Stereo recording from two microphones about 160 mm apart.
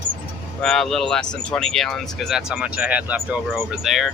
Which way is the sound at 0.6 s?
Centre (ahead or behind).